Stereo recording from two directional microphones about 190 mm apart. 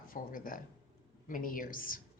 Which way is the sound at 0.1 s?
50° left (ahead or behind).